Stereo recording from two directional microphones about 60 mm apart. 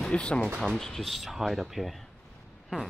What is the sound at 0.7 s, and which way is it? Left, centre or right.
Speech, centre.